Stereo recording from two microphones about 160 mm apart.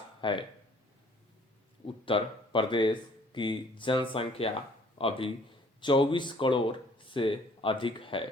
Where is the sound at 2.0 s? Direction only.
35° left (ahead or behind).